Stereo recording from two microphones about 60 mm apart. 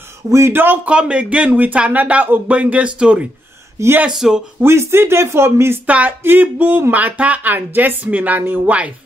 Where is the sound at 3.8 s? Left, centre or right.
Right.